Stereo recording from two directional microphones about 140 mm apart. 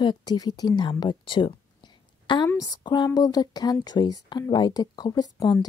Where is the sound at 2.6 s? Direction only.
30° left (ahead or behind).